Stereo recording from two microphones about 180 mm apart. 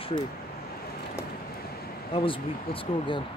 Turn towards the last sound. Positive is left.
turn(degrees=30)  # may be behind; listen again after turning